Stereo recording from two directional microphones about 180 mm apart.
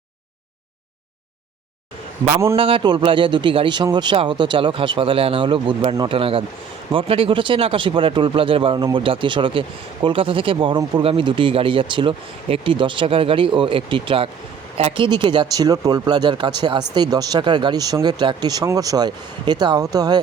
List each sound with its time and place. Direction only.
2.6 s speech: 30° right (ahead or behind)